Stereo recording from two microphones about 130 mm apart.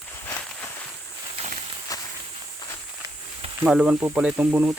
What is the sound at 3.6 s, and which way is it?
Speech, 5° right (ahead or behind).